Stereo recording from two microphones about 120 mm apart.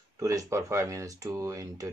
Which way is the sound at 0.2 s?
25° right (ahead or behind).